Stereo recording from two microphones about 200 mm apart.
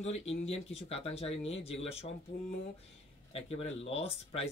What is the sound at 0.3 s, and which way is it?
Speech, 30° left (ahead or behind).